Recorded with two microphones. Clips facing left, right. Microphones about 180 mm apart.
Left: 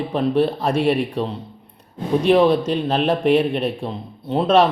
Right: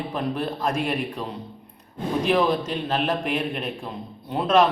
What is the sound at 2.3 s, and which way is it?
Speech, 30° left (ahead or behind).